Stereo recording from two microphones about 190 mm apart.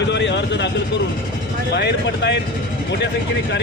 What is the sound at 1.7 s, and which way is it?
Speech, 60° left (ahead or behind).